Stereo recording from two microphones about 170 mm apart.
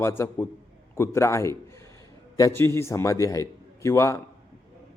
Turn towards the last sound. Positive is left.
turn(degrees=15)  # may be behind; listen again after turning